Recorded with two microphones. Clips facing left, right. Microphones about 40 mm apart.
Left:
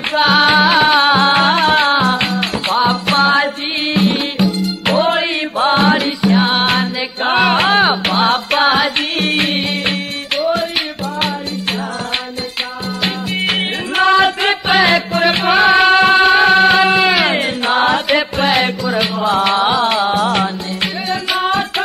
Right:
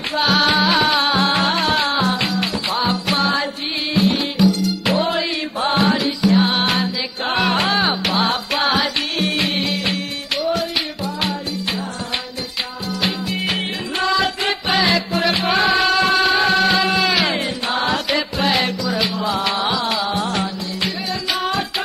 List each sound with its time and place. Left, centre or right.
0.4 s music: left
1.4 s music: left
5.9 s music: left
6.3 s music: left
8.1 s music: centre
8.5 s music: left
13.3 s music: left
14.4 s music: left
15.8 s music: left
21.3 s music: left